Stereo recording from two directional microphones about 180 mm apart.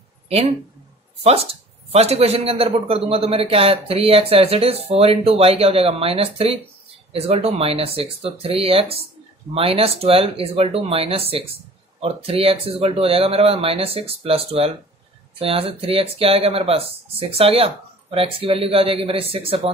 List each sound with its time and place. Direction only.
1.2 s a man's voice: 35° right (ahead or behind)